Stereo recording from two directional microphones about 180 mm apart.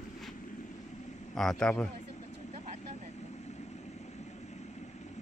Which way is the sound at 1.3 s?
Centre (ahead or behind).